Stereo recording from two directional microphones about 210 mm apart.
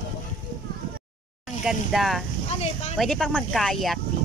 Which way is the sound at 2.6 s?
30° left (ahead or behind).